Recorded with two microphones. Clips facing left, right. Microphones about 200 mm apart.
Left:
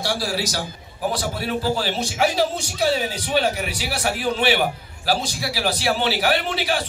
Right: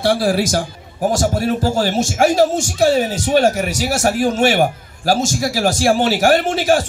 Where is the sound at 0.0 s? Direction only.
55° right (ahead or behind).